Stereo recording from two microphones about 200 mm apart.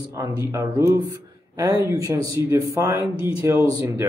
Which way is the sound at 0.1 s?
15° right (ahead or behind).